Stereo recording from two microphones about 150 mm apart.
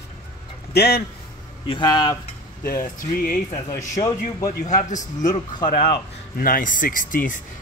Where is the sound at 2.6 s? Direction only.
70° left (ahead or behind).